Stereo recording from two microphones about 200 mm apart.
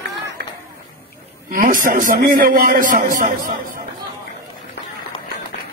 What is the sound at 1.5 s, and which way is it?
A man's voice, 45° right (ahead or behind).